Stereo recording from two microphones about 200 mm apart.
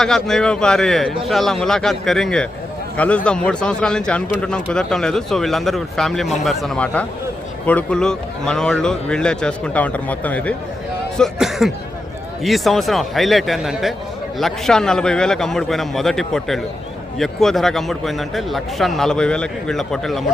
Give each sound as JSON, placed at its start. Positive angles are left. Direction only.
{"t": 0.0, "sound": "a man's voice", "side_deg": 0}